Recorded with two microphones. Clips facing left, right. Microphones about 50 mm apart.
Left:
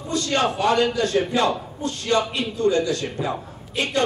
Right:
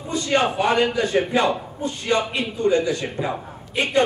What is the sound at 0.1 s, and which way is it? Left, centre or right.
A man's voice, centre.